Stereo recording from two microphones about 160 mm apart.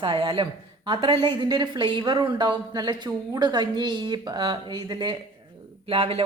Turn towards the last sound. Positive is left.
turn(degrees=-35)  # may be behind; listen again after turning